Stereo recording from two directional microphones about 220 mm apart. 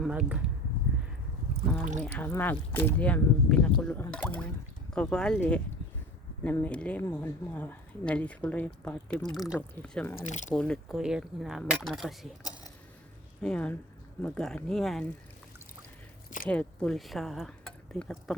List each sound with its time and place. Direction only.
0.0 s speech: 5° right (ahead or behind)
2.1 s speech: 10° left (ahead or behind)
10.2 s speech: 35° left (ahead or behind)
10.5 s speech: 5° left (ahead or behind)
13.4 s speech: 5° left (ahead or behind)
16.5 s speech: 5° left (ahead or behind)